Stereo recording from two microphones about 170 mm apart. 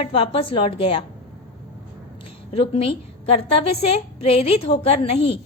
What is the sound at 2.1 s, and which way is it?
A woman's voice, 35° left (ahead or behind).